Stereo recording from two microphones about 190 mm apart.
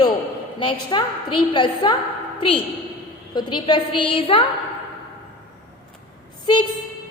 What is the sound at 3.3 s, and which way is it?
A woman's voice, 25° left (ahead or behind).